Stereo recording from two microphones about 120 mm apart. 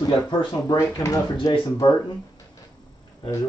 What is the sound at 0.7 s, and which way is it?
Speech, 25° left (ahead or behind).